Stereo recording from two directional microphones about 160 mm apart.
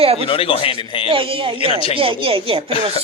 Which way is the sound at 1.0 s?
35° right (ahead or behind).